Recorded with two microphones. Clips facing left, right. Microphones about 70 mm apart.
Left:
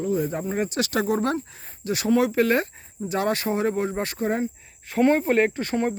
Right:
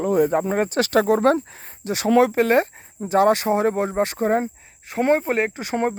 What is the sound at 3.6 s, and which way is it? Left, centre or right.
Speech, right.